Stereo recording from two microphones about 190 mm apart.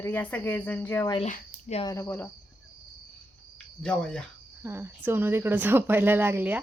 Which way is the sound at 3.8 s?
5° left (ahead or behind).